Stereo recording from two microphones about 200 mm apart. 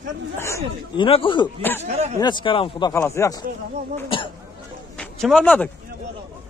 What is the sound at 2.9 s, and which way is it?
Speech, 15° left (ahead or behind).